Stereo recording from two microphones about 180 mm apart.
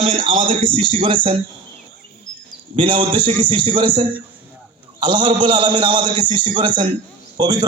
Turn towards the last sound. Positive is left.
turn(degrees=-25)  # may be behind; listen again after turning